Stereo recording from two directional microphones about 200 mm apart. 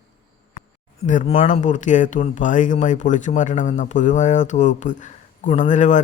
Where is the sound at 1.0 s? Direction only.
40° left (ahead or behind).